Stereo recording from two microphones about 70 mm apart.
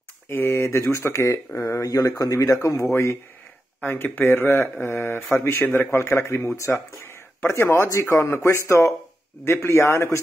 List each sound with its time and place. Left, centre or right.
0.3 s speech: left
3.8 s speech: left
7.6 s speech: left
9.4 s speech: left